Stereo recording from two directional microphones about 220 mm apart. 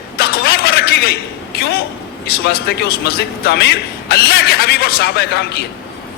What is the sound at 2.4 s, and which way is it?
A man's voice, 45° left (ahead or behind).